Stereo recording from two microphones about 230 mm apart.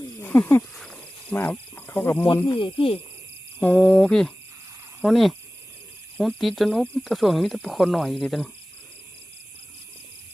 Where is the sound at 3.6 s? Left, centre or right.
Centre.